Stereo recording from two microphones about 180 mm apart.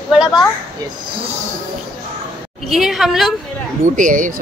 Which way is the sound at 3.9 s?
45° right (ahead or behind).